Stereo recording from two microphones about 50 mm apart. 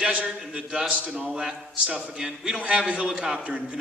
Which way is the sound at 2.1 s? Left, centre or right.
Centre.